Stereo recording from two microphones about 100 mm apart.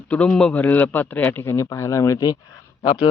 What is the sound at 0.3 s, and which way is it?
A man's voice, 10° left (ahead or behind).